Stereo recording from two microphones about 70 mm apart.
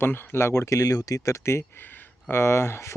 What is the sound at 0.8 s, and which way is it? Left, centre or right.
Speech, left.